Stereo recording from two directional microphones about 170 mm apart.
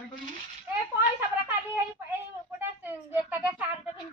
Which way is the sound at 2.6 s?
10° right (ahead or behind).